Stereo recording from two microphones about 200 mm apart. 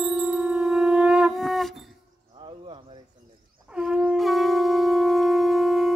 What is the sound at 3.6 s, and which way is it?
Shofar, 5° right (ahead or behind).